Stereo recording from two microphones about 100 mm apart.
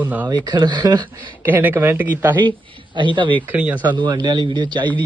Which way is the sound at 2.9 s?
55° right (ahead or behind).